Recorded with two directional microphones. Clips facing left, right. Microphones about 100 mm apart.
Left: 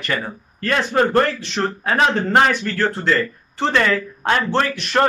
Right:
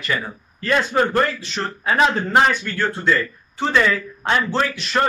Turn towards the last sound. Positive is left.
turn(degrees=55)  # may be behind; listen again after turning